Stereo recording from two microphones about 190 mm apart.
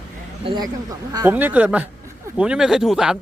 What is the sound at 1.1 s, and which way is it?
Speech, 15° right (ahead or behind).